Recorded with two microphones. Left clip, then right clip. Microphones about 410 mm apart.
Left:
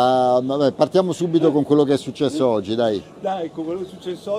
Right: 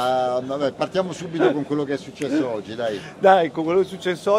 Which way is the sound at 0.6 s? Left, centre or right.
Left.